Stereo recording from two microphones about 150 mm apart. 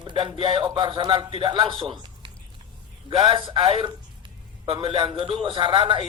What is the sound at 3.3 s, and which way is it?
Speech, 35° right (ahead or behind).